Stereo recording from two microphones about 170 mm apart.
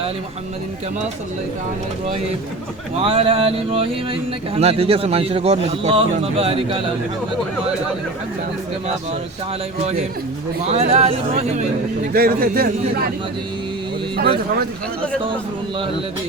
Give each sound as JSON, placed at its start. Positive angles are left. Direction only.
{"t": 3.0, "sound": "speech", "side_deg": -35}
{"t": 10.7, "sound": "speech", "side_deg": -40}
{"t": 12.1, "sound": "a man's voice", "side_deg": -65}